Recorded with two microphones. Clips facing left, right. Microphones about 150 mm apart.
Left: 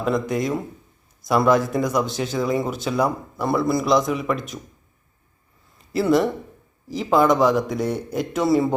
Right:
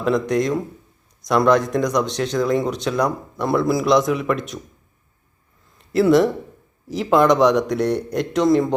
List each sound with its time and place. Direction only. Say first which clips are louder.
0.0 s speech: right 3 dB; centre (ahead or behind)
5.7 s a sound: right 4 dB; centre (ahead or behind)
6.8 s speech: right 2 dB; centre (ahead or behind)